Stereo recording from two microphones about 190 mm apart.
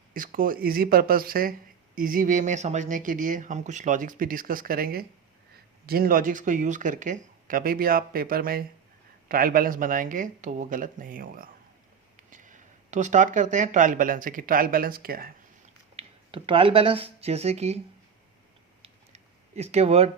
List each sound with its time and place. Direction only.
0.1 s speech: 45° right (ahead or behind)
16.0 s speech: 25° right (ahead or behind)
18.8 s a sound: 35° right (ahead or behind)